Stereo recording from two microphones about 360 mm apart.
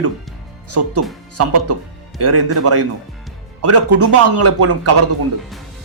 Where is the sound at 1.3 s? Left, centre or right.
Right.